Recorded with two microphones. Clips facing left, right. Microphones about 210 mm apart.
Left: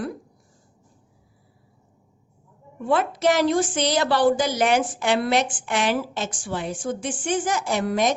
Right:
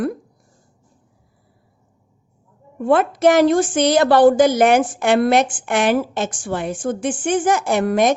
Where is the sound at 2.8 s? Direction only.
55° right (ahead or behind).